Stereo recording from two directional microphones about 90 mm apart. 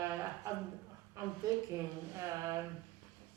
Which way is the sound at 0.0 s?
35° right (ahead or behind).